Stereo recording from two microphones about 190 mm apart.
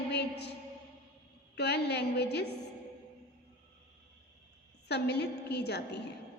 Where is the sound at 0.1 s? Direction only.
60° left (ahead or behind).